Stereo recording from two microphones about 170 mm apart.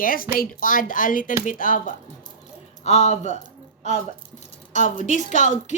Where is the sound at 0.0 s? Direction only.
55° left (ahead or behind).